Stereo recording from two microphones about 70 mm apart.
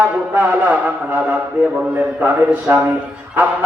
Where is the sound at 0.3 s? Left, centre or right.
Right.